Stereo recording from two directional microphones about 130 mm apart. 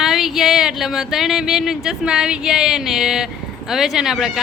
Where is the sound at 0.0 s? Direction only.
Centre (ahead or behind).